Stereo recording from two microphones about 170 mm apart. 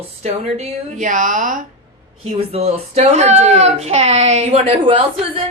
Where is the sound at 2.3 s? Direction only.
35° right (ahead or behind).